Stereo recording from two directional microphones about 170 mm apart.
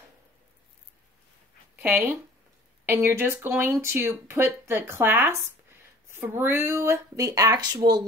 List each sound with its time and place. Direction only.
1.8 s speech: 10° right (ahead or behind)